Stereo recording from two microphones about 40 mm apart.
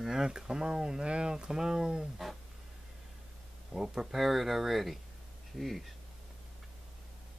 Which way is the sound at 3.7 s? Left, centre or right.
Centre.